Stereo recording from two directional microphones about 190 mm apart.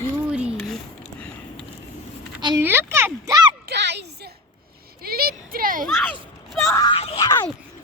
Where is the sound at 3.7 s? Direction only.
65° right (ahead or behind).